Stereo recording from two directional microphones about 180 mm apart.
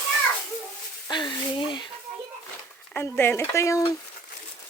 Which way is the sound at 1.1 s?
25° left (ahead or behind).